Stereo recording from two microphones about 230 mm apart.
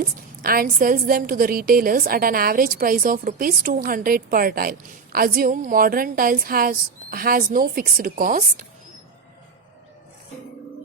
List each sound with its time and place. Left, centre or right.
0.4 s a woman's voice: right